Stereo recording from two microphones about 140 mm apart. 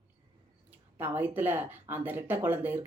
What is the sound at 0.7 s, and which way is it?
Speech, 15° right (ahead or behind).